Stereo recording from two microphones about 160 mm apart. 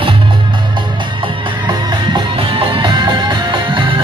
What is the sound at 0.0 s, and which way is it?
Music, 30° right (ahead or behind).